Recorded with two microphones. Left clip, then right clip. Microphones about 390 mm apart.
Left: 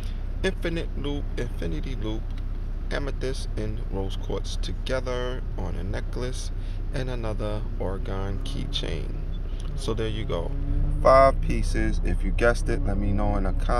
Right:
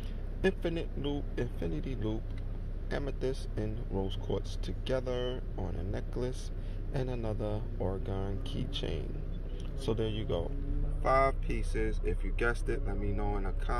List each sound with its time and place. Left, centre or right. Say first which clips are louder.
0.4 s speech: left 4 dB; centre